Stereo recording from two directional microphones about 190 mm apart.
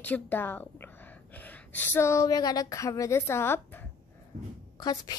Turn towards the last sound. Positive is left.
turn(degrees=20)  # may be behind; listen again after turning